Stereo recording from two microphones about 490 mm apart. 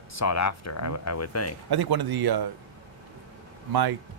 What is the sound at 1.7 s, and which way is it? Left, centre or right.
Speech, right.